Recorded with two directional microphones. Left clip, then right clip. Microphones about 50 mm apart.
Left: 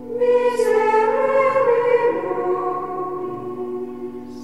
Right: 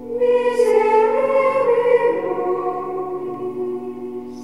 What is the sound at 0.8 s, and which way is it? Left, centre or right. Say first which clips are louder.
Music: right 1 dB; centre.